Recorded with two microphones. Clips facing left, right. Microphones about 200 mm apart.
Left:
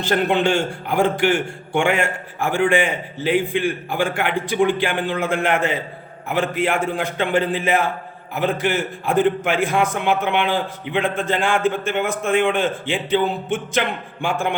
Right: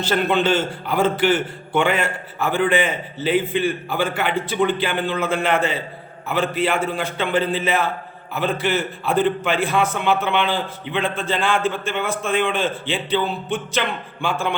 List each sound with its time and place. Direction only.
0.0 s a man's voice: 15° left (ahead or behind)